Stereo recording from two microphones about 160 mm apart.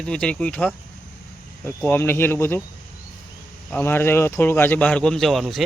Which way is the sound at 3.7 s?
15° left (ahead or behind).